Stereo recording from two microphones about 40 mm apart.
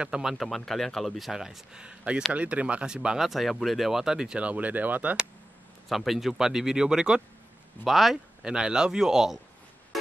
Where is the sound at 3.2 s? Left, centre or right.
Centre.